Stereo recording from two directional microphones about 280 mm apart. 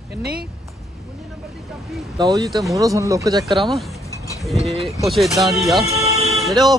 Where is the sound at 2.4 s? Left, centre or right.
Centre.